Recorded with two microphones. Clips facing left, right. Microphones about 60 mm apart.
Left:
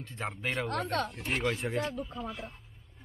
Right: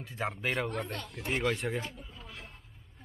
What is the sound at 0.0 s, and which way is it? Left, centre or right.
Speech, centre.